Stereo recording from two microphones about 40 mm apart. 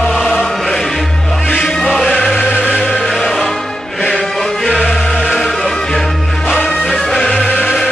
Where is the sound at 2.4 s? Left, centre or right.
Left.